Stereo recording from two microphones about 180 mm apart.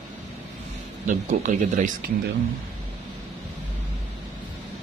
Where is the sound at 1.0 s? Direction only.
45° right (ahead or behind).